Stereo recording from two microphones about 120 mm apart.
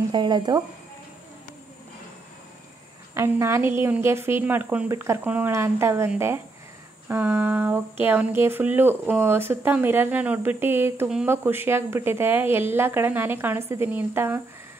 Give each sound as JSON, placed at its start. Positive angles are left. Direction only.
{"t": 0.1, "sound": "speech", "side_deg": -40}
{"t": 3.2, "sound": "a woman's voice", "side_deg": -25}